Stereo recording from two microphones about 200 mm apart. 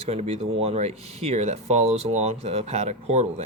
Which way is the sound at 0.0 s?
30° right (ahead or behind).